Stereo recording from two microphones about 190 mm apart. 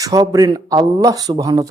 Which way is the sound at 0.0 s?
20° right (ahead or behind).